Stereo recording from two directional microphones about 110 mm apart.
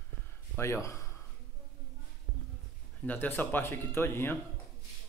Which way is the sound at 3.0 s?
15° left (ahead or behind).